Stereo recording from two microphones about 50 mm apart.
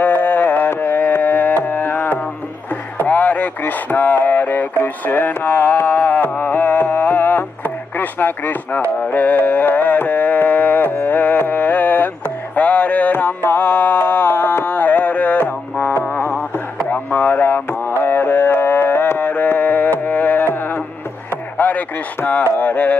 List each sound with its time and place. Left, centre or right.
0.0 s music: left
3.0 s a sound: left
9.0 s carnatic music: left
11.1 s music: left
13.1 s music: left
16.9 s a sound: left
18.0 s music: left
21.5 s chop: left
22.6 s a sound: left